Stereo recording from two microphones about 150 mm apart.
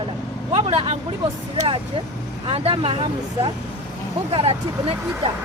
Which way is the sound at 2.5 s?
40° right (ahead or behind).